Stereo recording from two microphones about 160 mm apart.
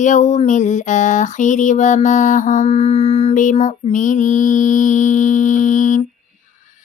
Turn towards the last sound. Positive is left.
turn(degrees=50)  # may be behind; listen again after turning